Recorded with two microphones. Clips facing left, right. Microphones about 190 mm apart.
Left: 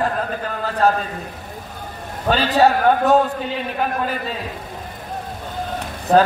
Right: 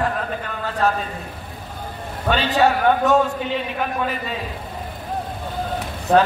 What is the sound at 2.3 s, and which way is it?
Speech, 35° left (ahead or behind).